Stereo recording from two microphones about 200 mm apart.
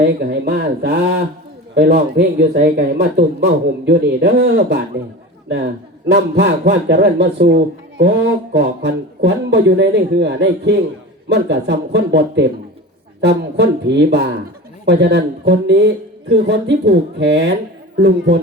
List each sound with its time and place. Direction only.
0.0 s a man's voice: 55° right (ahead or behind)
6.1 s a man's voice: 55° right (ahead or behind)